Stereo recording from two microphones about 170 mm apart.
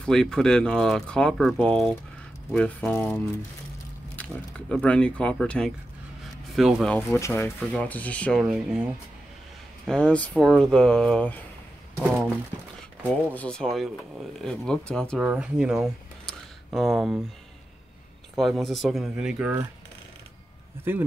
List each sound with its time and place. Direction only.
0.0 s speech: 5° left (ahead or behind)
4.2 s speech: 5° left (ahead or behind)
7.0 s speech: 15° left (ahead or behind)
8.5 s speech: 5° right (ahead or behind)
9.8 s speech: 5° left (ahead or behind)
13.1 s speech: 5° left (ahead or behind)
15.2 s speech: 5° right (ahead or behind)
18.3 s speech: centre (ahead or behind)